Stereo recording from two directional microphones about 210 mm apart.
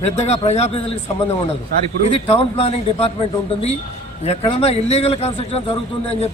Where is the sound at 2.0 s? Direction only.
25° left (ahead or behind).